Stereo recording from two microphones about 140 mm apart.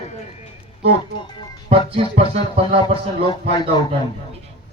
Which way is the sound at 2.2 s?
45° right (ahead or behind).